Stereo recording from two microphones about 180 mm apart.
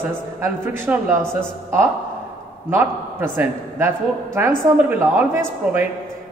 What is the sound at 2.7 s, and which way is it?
A man's voice, 10° right (ahead or behind).